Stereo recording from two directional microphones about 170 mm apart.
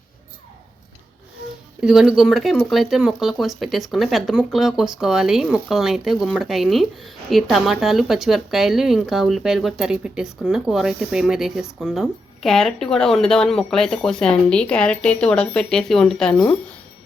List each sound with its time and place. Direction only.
1.8 s speech: 5° right (ahead or behind)